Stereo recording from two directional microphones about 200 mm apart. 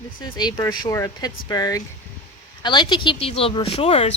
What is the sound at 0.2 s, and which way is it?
Speech, 20° left (ahead or behind).